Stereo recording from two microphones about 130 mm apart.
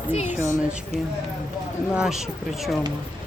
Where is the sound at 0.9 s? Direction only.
60° right (ahead or behind).